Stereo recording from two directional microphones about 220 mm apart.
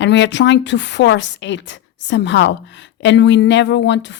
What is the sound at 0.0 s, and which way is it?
Speech, 55° left (ahead or behind).